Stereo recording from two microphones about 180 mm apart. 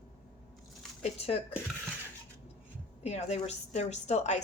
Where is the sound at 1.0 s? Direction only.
35° left (ahead or behind).